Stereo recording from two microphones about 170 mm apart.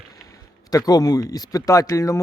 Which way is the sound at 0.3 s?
20° left (ahead or behind).